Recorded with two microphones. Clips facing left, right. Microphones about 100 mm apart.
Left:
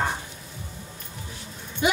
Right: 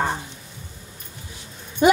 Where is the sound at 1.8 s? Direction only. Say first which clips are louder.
Right 8 dB; 40° right (ahead or behind).